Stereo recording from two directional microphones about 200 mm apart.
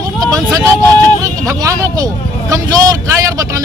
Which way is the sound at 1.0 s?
15° right (ahead or behind).